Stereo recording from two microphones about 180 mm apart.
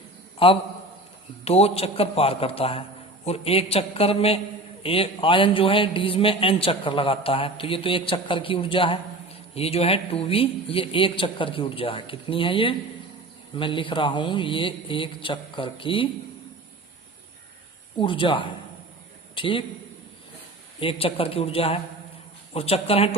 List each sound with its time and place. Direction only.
0.3 s a man's voice: 30° left (ahead or behind)
17.9 s a man's voice: 30° left (ahead or behind)
20.7 s a man's voice: 30° left (ahead or behind)